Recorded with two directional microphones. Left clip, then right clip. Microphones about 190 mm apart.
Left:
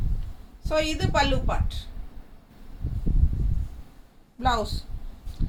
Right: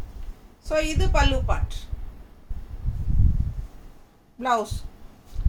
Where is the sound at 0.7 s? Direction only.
10° right (ahead or behind).